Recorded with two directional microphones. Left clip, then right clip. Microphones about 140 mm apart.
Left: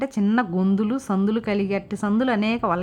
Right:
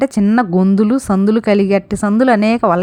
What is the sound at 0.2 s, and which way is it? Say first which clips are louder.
Speech: right 8 dB; 40° right (ahead or behind).